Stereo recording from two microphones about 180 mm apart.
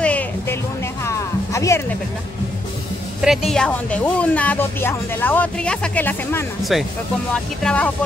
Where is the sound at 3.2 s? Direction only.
Centre (ahead or behind).